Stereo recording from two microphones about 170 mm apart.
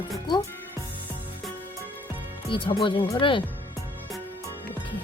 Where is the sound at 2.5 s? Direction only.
30° left (ahead or behind).